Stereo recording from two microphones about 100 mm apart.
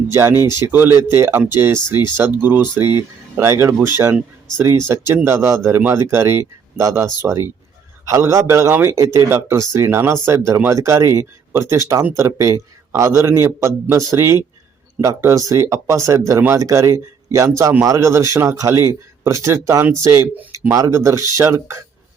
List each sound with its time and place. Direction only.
0.1 s speech: 25° right (ahead or behind)
4.9 s speech: 25° right (ahead or behind)